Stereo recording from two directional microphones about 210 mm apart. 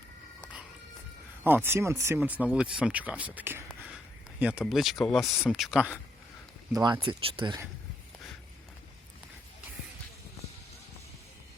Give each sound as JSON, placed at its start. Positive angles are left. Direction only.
{"t": 1.5, "sound": "speech", "side_deg": -10}
{"t": 6.7, "sound": "speech", "side_deg": -20}